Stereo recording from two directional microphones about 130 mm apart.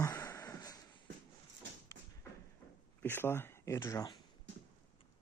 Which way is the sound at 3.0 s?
15° left (ahead or behind).